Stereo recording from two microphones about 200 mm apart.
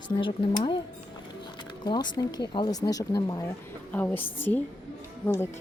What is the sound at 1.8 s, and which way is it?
Speech, 20° left (ahead or behind).